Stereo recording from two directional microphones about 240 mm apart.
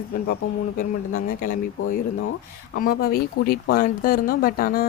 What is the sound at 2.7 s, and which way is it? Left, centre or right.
Speech, left.